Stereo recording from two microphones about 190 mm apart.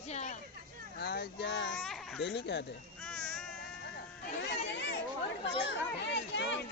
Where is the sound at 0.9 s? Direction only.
60° left (ahead or behind).